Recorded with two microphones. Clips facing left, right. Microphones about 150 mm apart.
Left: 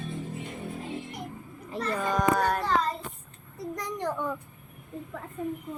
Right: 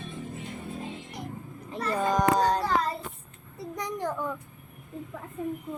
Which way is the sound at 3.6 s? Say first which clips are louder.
Even; centre (ahead or behind).